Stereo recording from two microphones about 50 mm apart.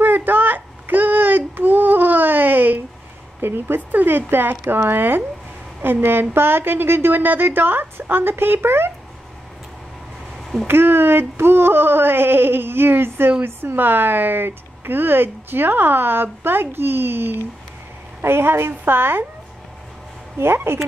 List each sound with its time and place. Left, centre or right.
0.0 s a sound: right
3.3 s speech: right
10.7 s speech: right
20.3 s speech: right